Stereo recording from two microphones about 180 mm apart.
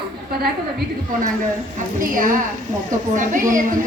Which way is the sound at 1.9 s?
50° right (ahead or behind).